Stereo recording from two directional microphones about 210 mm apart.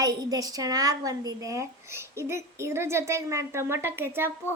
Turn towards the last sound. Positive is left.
turn(degrees=-10)  # may be behind; listen again after turning